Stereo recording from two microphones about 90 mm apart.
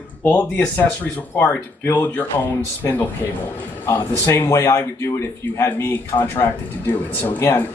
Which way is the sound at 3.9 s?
30° left (ahead or behind).